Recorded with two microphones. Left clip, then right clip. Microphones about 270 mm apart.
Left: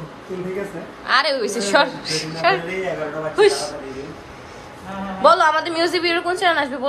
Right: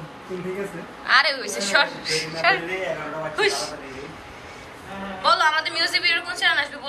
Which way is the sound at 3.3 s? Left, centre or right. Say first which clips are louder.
Left 7 dB; centre.